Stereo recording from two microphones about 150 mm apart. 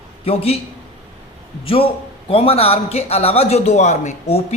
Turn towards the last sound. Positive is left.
turn(degrees=45)  # may be behind; listen again after turning